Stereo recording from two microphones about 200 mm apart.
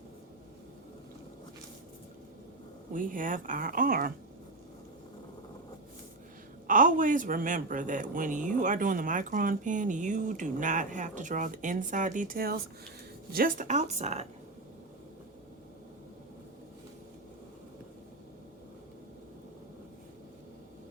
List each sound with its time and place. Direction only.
2.9 s speech: 40° right (ahead or behind)
6.7 s speech: 40° right (ahead or behind)